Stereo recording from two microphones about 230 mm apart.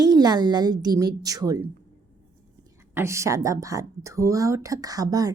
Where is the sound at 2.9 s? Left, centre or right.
Centre.